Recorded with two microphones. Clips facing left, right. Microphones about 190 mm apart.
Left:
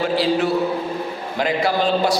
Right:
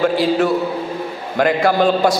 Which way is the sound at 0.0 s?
50° right (ahead or behind).